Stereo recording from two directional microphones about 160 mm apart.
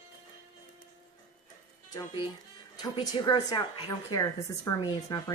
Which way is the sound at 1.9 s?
25° left (ahead or behind).